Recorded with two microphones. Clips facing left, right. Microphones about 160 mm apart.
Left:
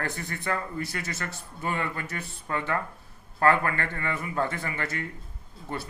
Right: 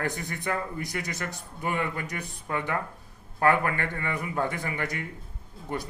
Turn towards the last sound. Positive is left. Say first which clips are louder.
# right 2 dB
turn(degrees=-15)  # may be behind; listen again after turning